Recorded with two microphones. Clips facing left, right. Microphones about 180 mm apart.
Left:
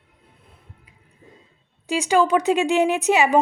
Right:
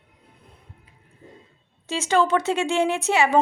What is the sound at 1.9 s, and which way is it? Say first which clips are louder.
A woman's voice: left 2 dB; 15° left (ahead or behind).